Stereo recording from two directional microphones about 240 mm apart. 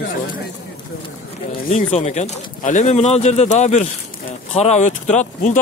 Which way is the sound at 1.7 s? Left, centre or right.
Left.